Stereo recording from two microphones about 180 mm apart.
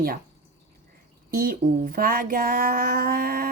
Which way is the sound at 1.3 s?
50° right (ahead or behind).